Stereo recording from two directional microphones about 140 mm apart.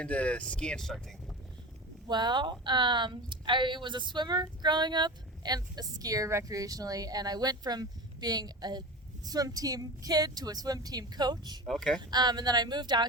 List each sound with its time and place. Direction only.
0.0 s speech: 10° left (ahead or behind)
2.0 s a woman's voice: 30° right (ahead or behind)
11.6 s speech: 5° left (ahead or behind)
11.9 s speech: 30° right (ahead or behind)